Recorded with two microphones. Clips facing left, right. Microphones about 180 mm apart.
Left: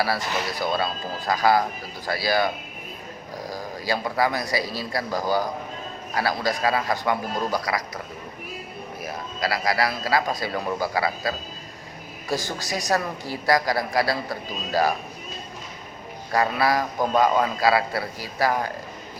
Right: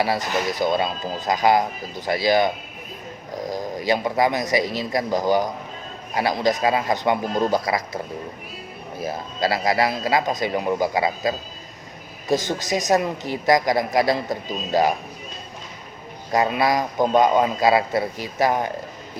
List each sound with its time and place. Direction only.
0.0 s a man's voice: 20° right (ahead or behind)
9.0 s a man's voice: 25° right (ahead or behind)
16.3 s a man's voice: 20° right (ahead or behind)